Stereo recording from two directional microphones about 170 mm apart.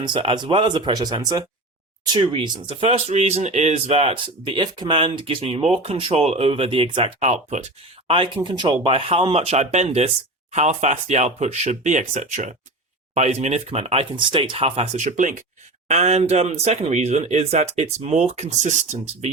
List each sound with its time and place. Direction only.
0.0 s speech: 30° right (ahead or behind)
7.2 s speech: 40° right (ahead or behind)